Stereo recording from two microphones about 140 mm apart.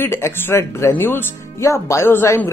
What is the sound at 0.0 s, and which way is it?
Speech, 15° left (ahead or behind).